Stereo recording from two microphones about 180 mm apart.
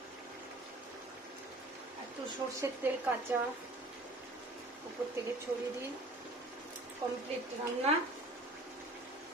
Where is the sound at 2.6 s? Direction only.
10° right (ahead or behind).